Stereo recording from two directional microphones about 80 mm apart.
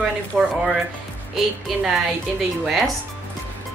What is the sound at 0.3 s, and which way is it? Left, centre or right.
Speech, centre.